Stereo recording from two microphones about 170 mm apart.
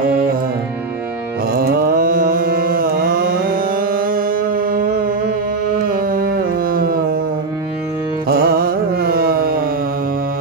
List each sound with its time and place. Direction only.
1.6 s carnatic music: 60° right (ahead or behind)
3.9 s music: 60° right (ahead or behind)
8.3 s carnatic music: 60° right (ahead or behind)